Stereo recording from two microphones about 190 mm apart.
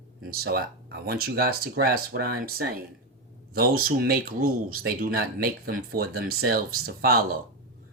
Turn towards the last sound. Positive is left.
turn(degrees=-50)  # may be behind; listen again after turning